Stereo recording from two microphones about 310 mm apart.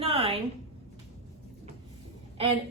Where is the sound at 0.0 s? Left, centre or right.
Centre.